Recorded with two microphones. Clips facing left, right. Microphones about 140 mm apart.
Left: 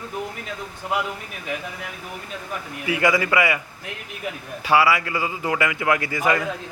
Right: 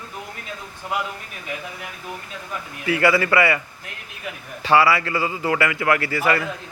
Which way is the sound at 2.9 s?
15° left (ahead or behind).